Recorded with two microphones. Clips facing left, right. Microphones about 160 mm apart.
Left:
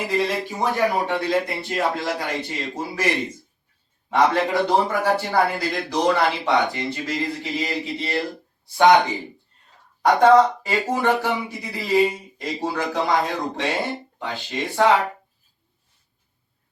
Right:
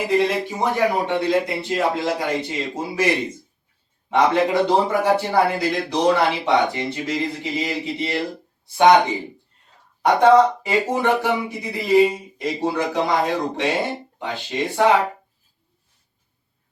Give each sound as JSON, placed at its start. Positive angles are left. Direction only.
{"t": 0.1, "sound": "speech", "side_deg": -20}
{"t": 4.1, "sound": "speech", "side_deg": -20}
{"t": 10.0, "sound": "speech", "side_deg": -20}